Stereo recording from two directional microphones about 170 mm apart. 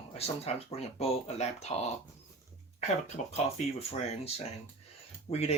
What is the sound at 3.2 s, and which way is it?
Speech, 45° left (ahead or behind).